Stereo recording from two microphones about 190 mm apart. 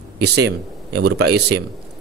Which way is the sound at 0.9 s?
60° right (ahead or behind).